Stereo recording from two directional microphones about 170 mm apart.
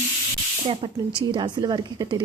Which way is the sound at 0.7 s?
30° right (ahead or behind).